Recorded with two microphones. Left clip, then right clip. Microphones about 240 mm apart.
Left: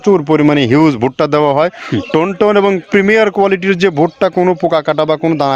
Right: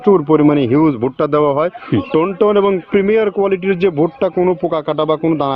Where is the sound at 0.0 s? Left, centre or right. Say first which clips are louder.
Left 1 dB; left.